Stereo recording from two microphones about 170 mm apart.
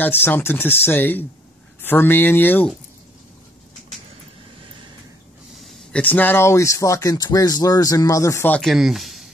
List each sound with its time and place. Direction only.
0.0 s speech: 10° left (ahead or behind)
5.6 s speech: 5° left (ahead or behind)
8.5 s speech: centre (ahead or behind)